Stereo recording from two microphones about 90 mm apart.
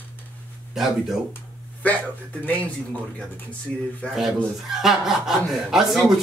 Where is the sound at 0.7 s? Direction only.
Centre (ahead or behind).